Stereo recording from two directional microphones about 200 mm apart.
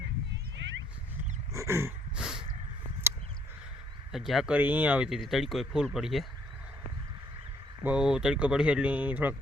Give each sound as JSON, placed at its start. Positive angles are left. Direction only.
{"t": 0.5, "sound": "cat", "side_deg": -65}
{"t": 1.5, "sound": "dog", "side_deg": -15}
{"t": 4.1, "sound": "speech", "side_deg": 0}
{"t": 7.9, "sound": "speech", "side_deg": -5}